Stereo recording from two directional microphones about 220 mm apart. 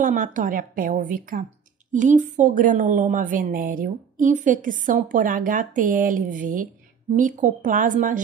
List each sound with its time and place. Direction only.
0.0 s a woman's voice: 40° right (ahead or behind)